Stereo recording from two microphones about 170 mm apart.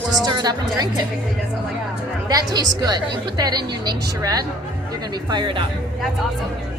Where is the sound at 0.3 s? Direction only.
25° right (ahead or behind).